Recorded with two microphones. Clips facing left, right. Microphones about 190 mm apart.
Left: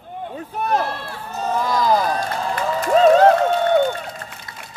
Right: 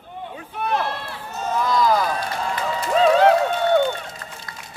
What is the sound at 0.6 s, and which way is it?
Run, 45° left (ahead or behind).